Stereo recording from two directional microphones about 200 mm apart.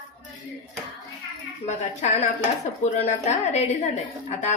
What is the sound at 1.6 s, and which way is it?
A woman's voice, 35° left (ahead or behind).